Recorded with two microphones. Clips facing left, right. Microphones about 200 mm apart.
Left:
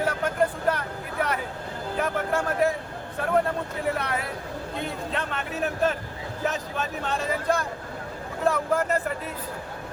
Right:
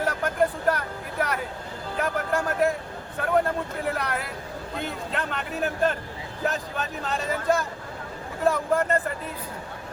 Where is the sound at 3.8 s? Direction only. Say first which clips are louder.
Left 3 dB; centre (ahead or behind).